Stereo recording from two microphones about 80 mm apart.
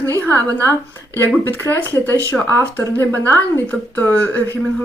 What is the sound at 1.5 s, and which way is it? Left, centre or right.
A woman's voice, left.